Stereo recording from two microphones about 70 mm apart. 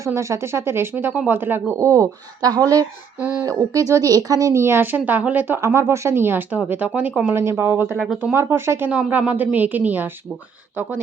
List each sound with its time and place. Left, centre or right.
0.0 s speech: right
2.4 s speech: right
3.2 s a woman's voice: right
3.4 s speech: right
4.6 s a woman's voice: right
5.5 s a woman's voice: right
7.3 s speech: right
7.9 s speech: centre
8.2 s speech: right
8.9 s a woman's voice: centre